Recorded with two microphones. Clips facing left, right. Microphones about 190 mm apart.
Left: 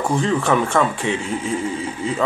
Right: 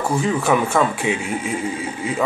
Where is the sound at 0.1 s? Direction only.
5° right (ahead or behind).